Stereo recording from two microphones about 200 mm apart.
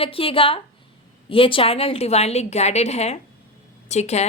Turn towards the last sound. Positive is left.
turn(degrees=35)  # may be behind; listen again after turning